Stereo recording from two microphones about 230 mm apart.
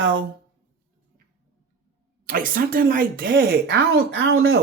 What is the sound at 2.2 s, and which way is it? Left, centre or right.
Speech, right.